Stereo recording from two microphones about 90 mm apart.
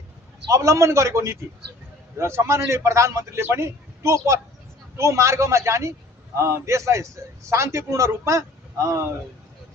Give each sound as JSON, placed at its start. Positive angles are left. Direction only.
{"t": 0.5, "sound": "a man's voice", "side_deg": -35}